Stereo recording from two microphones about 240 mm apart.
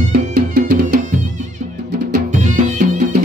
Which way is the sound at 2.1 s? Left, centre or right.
Right.